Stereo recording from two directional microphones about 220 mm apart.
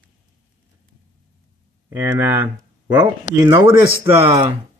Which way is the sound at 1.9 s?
10° right (ahead or behind).